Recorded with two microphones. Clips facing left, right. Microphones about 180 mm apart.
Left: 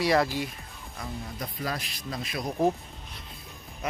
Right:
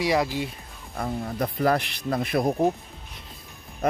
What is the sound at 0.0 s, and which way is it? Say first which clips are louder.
Speech: right 1 dB; 15° right (ahead or behind).